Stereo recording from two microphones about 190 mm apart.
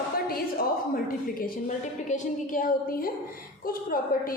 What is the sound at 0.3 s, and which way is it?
A woman's voice, 50° left (ahead or behind).